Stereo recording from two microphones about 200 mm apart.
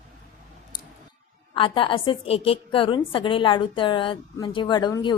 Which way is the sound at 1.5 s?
25° left (ahead or behind).